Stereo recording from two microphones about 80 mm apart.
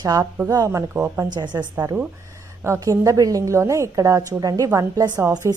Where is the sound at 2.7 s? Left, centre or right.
Right.